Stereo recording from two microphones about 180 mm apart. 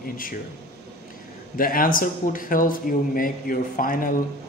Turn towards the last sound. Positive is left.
turn(degrees=50)  # may be behind; listen again after turning